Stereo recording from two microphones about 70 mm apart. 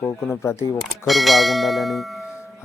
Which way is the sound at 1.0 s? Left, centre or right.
Centre.